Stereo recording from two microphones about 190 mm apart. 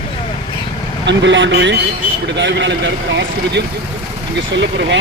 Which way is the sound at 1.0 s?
70° right (ahead or behind).